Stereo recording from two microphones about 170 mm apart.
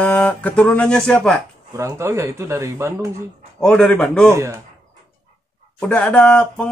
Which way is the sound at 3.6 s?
5° left (ahead or behind).